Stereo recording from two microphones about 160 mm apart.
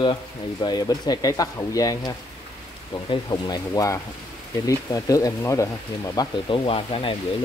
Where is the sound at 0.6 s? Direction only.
25° left (ahead or behind).